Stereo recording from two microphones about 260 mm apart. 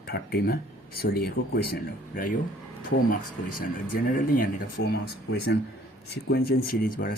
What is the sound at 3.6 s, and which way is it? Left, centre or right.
Speech, left.